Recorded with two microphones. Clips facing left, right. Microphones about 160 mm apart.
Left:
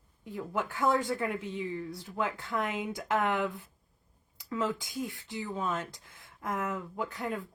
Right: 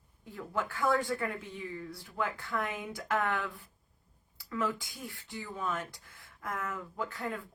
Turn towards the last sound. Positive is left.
turn(degrees=20)  # may be behind; listen again after turning